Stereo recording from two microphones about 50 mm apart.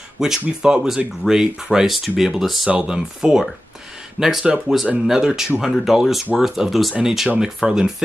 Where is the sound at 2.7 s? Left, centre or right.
Centre.